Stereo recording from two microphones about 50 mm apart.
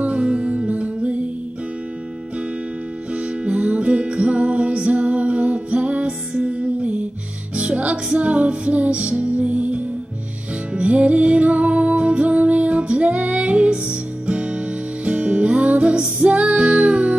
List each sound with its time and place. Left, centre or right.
0.0 s music: right
3.1 s music: right